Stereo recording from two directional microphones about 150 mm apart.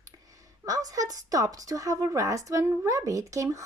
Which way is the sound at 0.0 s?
25° right (ahead or behind).